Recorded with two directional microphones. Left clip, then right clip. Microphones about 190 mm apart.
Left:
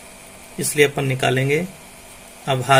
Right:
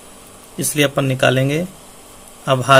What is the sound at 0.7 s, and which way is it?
Speech, 55° right (ahead or behind).